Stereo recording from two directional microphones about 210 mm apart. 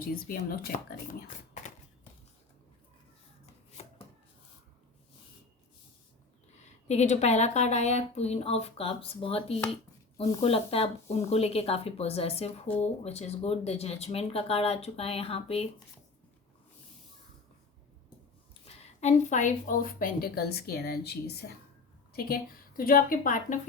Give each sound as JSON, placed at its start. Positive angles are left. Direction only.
{"t": 0.0, "sound": "a woman's voice", "side_deg": 45}
{"t": 3.8, "sound": "chopping", "side_deg": 30}
{"t": 6.8, "sound": "a woman's voice", "side_deg": 30}
{"t": 18.6, "sound": "a woman's voice", "side_deg": 30}